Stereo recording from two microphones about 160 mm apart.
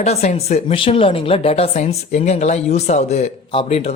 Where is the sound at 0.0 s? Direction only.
45° left (ahead or behind).